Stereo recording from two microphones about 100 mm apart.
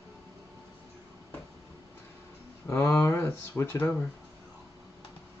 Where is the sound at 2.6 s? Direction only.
25° left (ahead or behind).